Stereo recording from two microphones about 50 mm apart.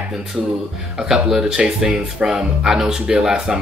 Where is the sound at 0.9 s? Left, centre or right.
Centre.